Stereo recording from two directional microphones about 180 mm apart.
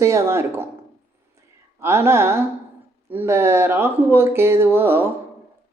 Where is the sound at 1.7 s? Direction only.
15° right (ahead or behind).